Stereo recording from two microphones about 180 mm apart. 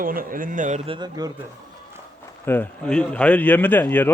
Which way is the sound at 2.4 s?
10° left (ahead or behind).